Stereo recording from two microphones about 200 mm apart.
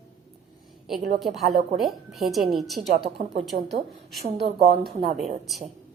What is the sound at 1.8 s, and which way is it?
A woman's voice, centre (ahead or behind).